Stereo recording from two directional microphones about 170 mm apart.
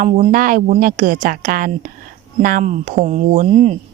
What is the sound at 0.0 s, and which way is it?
A woman's voice, 45° right (ahead or behind).